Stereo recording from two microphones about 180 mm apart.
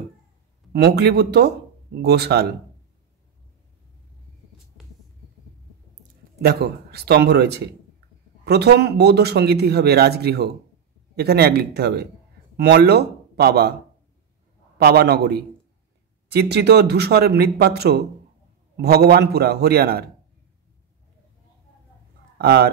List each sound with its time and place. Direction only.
0.7 s speech: 65° right (ahead or behind)
6.4 s speech: 60° right (ahead or behind)
14.8 s speech: 60° right (ahead or behind)
22.4 s speech: 60° right (ahead or behind)